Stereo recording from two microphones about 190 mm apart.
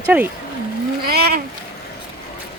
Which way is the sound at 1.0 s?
55° right (ahead or behind).